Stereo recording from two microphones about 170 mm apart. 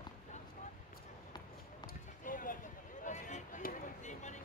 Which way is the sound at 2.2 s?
55° left (ahead or behind).